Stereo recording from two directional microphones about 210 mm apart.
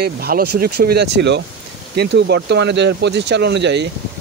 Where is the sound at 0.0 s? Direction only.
45° right (ahead or behind).